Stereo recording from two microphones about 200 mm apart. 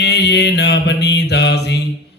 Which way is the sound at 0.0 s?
55° left (ahead or behind).